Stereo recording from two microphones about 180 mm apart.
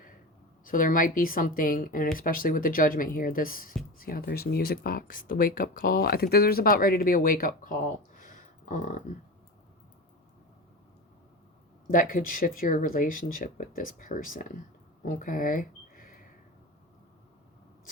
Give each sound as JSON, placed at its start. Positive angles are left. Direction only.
{"t": 0.6, "sound": "speech", "side_deg": 50}
{"t": 8.2, "sound": "a sound", "side_deg": 45}
{"t": 11.9, "sound": "speech", "side_deg": 50}